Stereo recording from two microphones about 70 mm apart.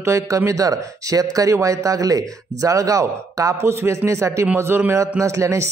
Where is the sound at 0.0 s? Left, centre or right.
Right.